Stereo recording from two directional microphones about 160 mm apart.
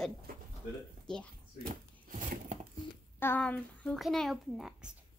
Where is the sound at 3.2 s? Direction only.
10° left (ahead or behind).